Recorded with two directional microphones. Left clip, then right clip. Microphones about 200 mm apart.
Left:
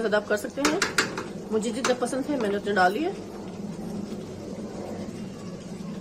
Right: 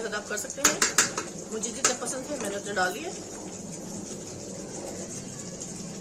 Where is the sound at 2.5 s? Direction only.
45° left (ahead or behind).